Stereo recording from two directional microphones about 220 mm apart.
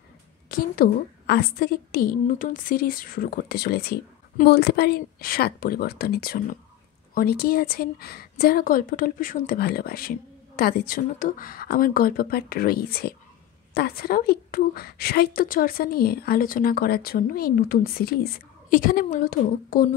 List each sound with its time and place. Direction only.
0.5 s a woman's voice: 40° left (ahead or behind)